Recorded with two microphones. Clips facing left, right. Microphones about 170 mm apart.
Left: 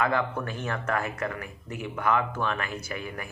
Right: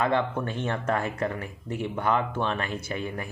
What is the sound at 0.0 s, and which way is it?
Speech, 25° right (ahead or behind).